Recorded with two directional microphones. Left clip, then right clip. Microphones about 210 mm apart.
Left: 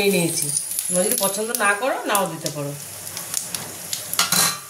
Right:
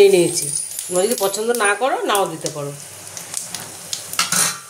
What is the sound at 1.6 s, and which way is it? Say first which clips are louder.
Speech: even; 50° right (ahead or behind).